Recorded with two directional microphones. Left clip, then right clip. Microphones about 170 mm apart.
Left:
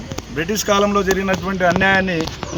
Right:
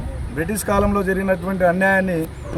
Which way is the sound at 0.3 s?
20° right (ahead or behind).